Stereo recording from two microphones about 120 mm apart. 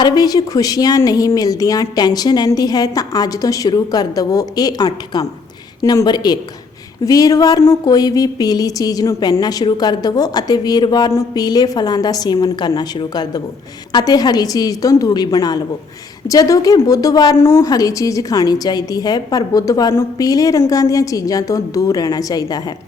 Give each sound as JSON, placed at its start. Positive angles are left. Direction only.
{"t": 0.0, "sound": "a woman's voice", "side_deg": 30}